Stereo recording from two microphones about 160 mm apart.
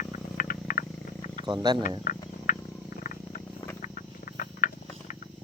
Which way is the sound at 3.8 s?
55° left (ahead or behind).